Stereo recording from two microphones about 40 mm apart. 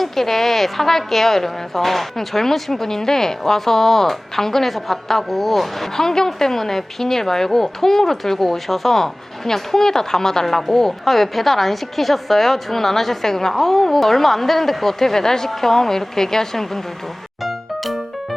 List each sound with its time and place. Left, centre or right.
0.0 s a woman's voice: centre
17.4 s music: centre